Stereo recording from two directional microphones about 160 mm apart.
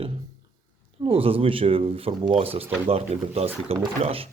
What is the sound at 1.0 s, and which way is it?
Speech, 35° right (ahead or behind).